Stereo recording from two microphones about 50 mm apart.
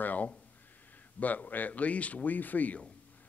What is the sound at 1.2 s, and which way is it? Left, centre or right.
Speech, left.